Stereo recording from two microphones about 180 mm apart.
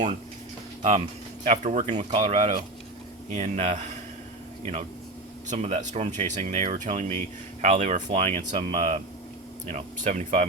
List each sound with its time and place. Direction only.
0.8 s speech: 35° right (ahead or behind)